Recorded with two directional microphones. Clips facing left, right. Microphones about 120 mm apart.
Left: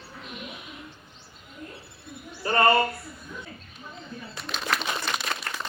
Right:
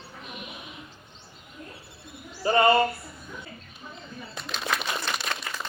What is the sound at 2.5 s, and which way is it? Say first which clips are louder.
Speech: even; 20° right (ahead or behind).